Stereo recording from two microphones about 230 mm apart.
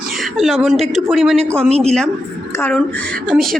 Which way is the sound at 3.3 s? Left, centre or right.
Centre.